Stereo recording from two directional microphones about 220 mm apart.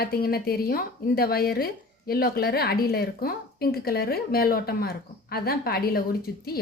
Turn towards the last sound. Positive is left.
turn(degrees=45)  # may be behind; listen again after turning